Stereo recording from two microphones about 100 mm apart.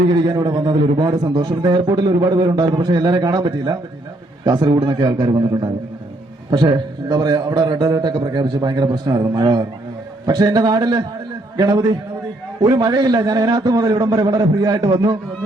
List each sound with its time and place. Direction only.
0.3 s a man's voice: 45° right (ahead or behind)